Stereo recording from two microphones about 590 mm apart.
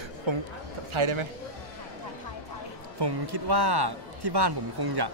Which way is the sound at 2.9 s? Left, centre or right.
Right.